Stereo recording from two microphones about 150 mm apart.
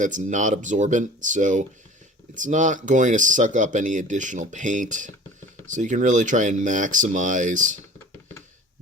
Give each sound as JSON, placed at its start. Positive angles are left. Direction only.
{"t": 0.0, "sound": "speech", "side_deg": -55}